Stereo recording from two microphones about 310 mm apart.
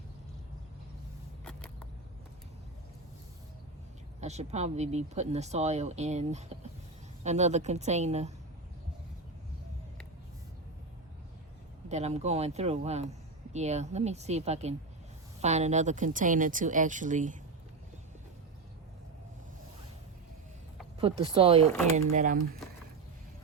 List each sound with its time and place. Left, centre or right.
1.5 s a sound: centre
4.2 s speech: right
11.9 s speech: right
21.0 s speech: centre